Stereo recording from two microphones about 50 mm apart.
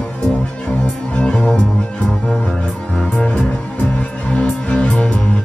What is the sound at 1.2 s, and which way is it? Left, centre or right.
Music, centre.